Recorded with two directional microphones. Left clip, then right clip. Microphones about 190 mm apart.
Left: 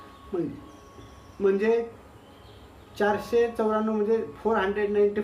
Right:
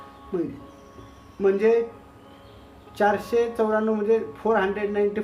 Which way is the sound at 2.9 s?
35° right (ahead or behind).